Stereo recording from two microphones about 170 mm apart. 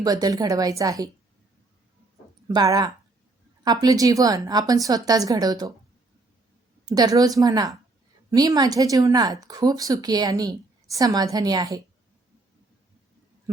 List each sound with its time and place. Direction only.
0.0 s speech: 20° right (ahead or behind)
2.5 s speech: 20° right (ahead or behind)
6.8 s speech: 20° right (ahead or behind)